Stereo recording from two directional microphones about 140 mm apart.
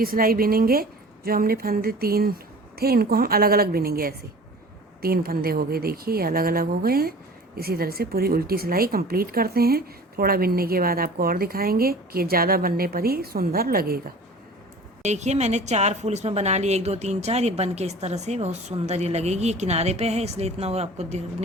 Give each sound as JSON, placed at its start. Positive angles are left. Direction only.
{"t": 0.0, "sound": "speech", "side_deg": -90}
{"t": 15.0, "sound": "a woman's voice", "side_deg": -55}